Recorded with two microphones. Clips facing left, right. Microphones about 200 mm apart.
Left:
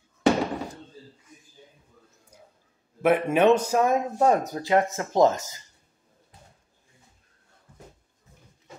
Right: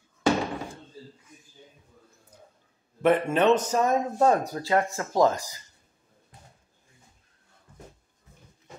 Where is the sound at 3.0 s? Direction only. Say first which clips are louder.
Left 1 dB; 10° left (ahead or behind).